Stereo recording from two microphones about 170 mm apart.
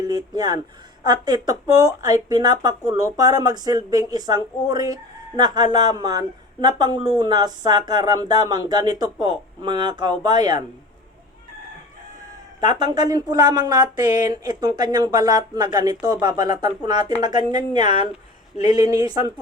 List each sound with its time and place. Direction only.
0.0 s speech: 25° right (ahead or behind)
12.5 s speech: 25° right (ahead or behind)